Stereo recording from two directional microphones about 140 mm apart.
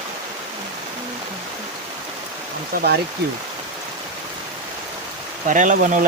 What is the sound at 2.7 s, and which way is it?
Speech, 90° right.